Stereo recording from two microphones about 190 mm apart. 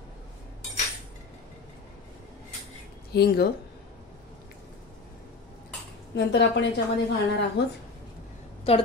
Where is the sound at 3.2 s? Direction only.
55° left (ahead or behind).